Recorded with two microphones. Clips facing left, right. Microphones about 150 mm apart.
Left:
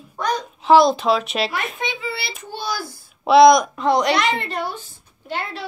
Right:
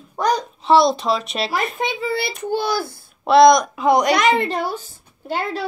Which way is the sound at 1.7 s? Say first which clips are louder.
Right 5 dB; 45° right (ahead or behind).